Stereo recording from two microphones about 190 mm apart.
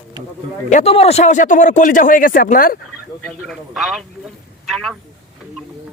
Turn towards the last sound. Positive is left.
turn(degrees=0)  # may be behind; listen again after turning